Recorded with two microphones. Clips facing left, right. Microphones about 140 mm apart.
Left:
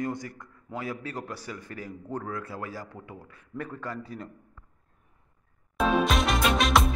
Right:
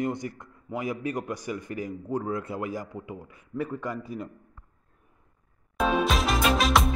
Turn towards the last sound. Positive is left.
turn(degrees=0)  # may be behind; listen again after turning